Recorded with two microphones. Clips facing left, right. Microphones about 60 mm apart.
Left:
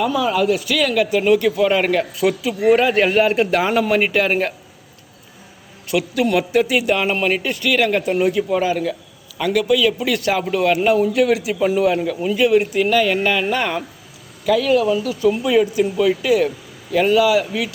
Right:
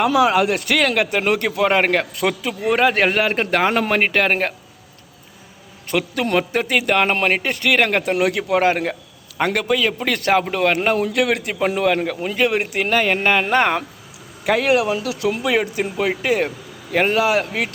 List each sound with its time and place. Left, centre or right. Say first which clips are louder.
0.0 s a man's voice: right 2 dB; right
5.9 s a man's voice: left 2 dB; right
14.4 s a man's voice: left 1 dB; right